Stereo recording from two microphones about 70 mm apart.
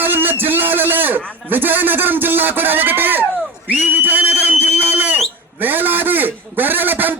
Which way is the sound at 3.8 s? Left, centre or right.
Right.